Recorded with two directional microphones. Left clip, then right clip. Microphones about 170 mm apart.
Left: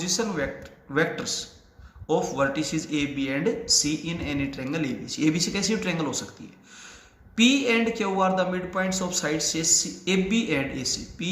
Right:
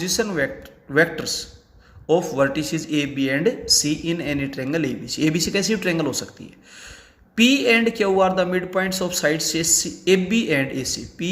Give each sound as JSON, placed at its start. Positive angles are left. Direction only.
{"t": 0.0, "sound": "a man's voice", "side_deg": -50}
{"t": 7.3, "sound": "speech", "side_deg": -50}